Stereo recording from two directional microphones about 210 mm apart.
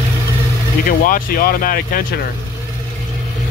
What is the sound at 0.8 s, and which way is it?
Speech, 40° left (ahead or behind).